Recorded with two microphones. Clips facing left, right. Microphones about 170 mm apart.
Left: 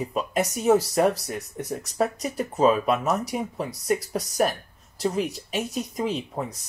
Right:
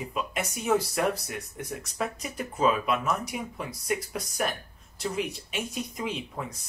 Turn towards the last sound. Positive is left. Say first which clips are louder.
# left 5 dB
turn(degrees=35)  # may be behind; listen again after turning